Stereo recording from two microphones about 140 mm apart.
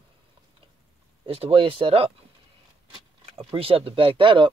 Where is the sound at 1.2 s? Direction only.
40° right (ahead or behind).